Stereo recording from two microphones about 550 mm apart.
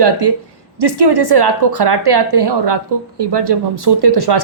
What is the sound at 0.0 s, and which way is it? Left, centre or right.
A woman's voice, right.